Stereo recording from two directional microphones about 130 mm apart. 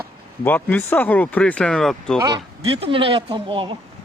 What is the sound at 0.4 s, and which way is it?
Speech, 15° left (ahead or behind).